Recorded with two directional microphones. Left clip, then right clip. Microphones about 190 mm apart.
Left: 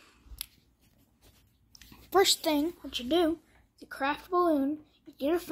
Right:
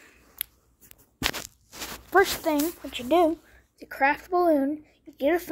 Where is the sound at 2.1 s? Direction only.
20° left (ahead or behind).